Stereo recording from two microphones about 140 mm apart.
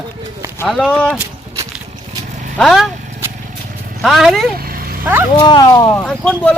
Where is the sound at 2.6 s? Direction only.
Centre (ahead or behind).